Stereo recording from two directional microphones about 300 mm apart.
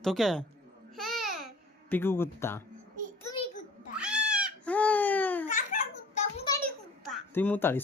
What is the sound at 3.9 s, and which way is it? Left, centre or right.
Cat, centre.